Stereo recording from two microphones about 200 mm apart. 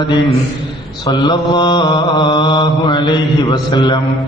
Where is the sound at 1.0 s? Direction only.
20° left (ahead or behind).